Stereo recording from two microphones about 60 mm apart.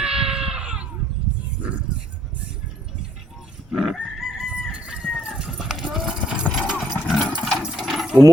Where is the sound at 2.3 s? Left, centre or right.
Right.